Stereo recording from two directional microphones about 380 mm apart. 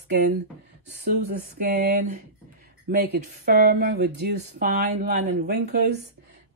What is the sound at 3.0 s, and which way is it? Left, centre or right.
Speech, right.